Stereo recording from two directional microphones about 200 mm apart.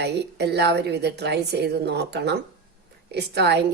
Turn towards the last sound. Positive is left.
turn(degrees=-55)  # may be behind; listen again after turning